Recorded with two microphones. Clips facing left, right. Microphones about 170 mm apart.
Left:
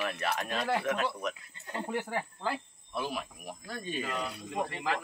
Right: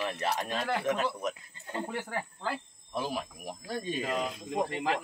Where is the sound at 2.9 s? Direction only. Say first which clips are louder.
Right 2 dB; 35° right (ahead or behind).